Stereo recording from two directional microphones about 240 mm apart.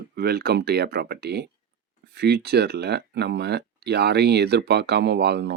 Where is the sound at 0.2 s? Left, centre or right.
Right.